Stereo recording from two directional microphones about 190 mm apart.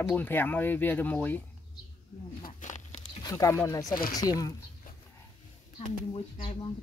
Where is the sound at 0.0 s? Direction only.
10° left (ahead or behind).